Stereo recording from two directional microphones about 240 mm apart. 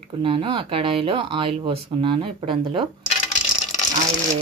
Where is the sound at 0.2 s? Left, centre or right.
Right.